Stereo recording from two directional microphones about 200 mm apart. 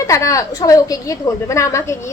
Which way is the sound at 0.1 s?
15° left (ahead or behind).